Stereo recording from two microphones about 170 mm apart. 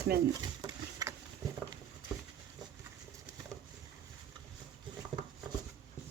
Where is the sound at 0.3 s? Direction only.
20° right (ahead or behind).